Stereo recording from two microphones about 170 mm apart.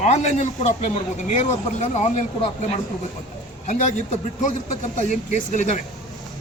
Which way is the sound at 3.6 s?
45° left (ahead or behind).